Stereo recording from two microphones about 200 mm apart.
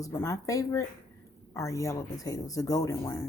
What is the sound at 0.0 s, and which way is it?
Speech, 15° left (ahead or behind).